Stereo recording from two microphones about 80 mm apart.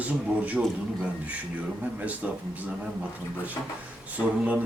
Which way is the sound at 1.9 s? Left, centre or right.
Centre.